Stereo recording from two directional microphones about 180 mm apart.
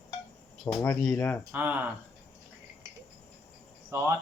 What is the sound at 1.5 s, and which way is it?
Speech, 10° right (ahead or behind).